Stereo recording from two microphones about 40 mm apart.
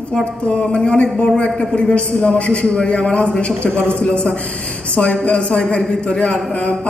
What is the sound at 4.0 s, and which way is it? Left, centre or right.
A woman's voice, left.